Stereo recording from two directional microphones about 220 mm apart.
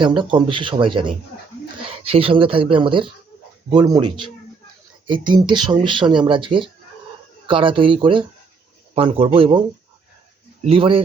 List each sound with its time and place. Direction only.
0.0 s speech: 20° right (ahead or behind)